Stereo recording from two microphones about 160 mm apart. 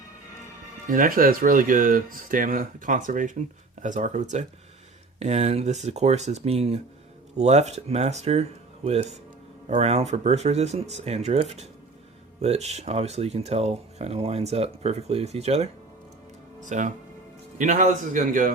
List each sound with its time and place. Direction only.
0.9 s speech: 60° right (ahead or behind)